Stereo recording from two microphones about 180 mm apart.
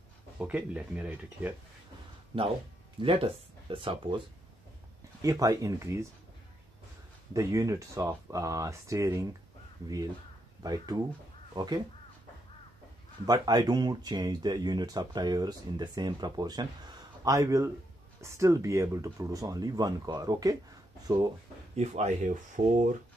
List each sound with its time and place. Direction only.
0.4 s speech: 10° right (ahead or behind)
3.0 s speech: 30° right (ahead or behind)
5.2 s speech: 20° right (ahead or behind)
7.3 s speech: 15° right (ahead or behind)
10.6 s speech: 20° right (ahead or behind)
13.2 s speech: 20° right (ahead or behind)
21.7 s speech: 40° right (ahead or behind)